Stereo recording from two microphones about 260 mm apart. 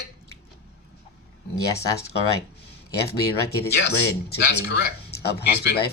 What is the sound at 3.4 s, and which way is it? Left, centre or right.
Speech, left.